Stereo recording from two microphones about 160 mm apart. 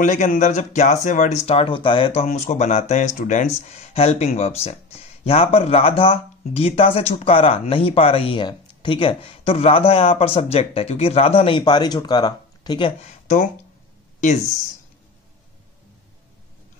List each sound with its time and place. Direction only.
0.0 s speech: 55° left (ahead or behind); by 2.2 s 30° left (ahead or behind)
2.2 s speech: 45° left (ahead or behind)